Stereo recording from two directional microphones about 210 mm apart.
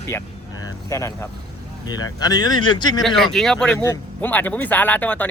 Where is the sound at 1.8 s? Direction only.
20° left (ahead or behind).